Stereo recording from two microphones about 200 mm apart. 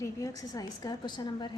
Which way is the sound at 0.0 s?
15° left (ahead or behind).